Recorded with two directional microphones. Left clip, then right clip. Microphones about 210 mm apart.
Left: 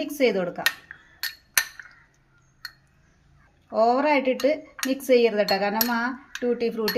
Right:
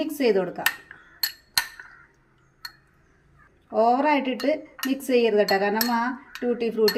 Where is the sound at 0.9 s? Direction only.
55° left (ahead or behind).